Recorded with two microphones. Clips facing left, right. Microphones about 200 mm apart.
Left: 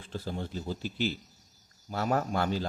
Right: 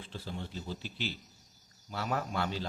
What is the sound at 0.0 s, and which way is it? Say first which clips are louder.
Speech: left 5 dB; 45° left (ahead or behind).